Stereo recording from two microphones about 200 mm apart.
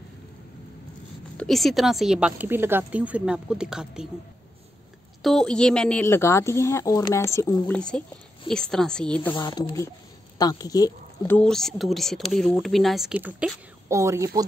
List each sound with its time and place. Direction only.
1.4 s speech: centre (ahead or behind)
5.2 s a woman's voice: centre (ahead or behind)
9.3 s speech: 20° left (ahead or behind)
11.3 s speech: 5° left (ahead or behind); by 14.4 s 15° right (ahead or behind)